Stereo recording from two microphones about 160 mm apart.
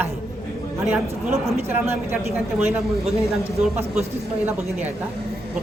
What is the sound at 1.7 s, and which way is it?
A man's voice, 10° right (ahead or behind).